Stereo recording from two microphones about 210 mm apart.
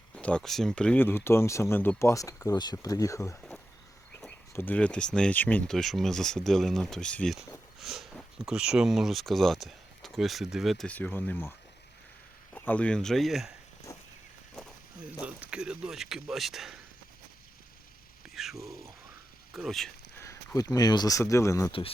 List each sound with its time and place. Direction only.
0.2 s speech: 5° left (ahead or behind)
12.5 s speech: 10° left (ahead or behind)
13.9 s a sound: 15° left (ahead or behind)
14.5 s speech: centre (ahead or behind)
18.3 s speech: centre (ahead or behind)
20.1 s speech: 15° left (ahead or behind)
21.7 s speech: 25° left (ahead or behind)